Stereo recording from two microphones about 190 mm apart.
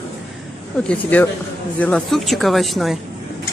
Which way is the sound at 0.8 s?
10° left (ahead or behind).